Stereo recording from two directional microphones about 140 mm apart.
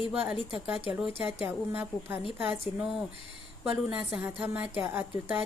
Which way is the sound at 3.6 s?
5° right (ahead or behind).